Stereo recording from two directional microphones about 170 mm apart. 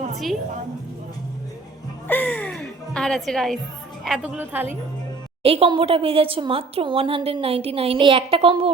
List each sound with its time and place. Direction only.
2.0 s music: 10° left (ahead or behind)
4.0 s a woman's voice: centre (ahead or behind)
4.4 s a woman's voice: 10° right (ahead or behind)
5.4 s a woman's voice: 35° right (ahead or behind)